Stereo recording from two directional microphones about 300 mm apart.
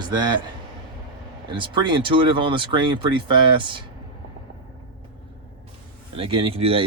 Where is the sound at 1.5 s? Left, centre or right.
Centre.